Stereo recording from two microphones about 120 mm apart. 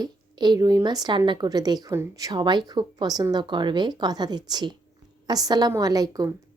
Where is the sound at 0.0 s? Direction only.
35° right (ahead or behind).